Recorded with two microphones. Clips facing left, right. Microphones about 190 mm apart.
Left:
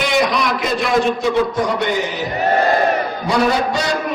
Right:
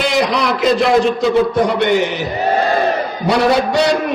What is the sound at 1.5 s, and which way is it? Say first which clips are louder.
Chant: right 5 dB; 65° right (ahead or behind).